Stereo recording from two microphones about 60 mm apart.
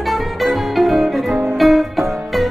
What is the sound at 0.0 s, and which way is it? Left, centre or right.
Music, centre.